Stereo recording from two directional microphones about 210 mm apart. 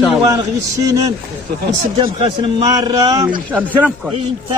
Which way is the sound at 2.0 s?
25° right (ahead or behind).